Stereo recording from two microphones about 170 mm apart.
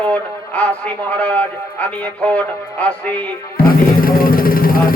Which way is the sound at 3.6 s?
60° left (ahead or behind).